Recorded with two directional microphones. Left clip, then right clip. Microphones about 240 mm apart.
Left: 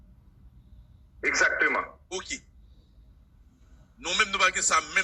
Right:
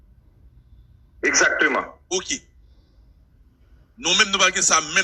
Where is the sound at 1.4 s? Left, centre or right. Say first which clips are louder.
Right 5 dB; right.